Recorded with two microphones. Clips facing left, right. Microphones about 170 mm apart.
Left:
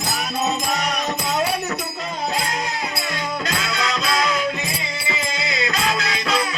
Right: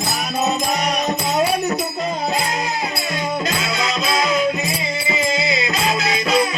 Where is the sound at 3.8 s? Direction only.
20° right (ahead or behind).